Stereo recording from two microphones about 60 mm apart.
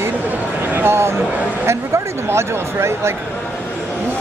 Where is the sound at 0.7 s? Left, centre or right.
Right.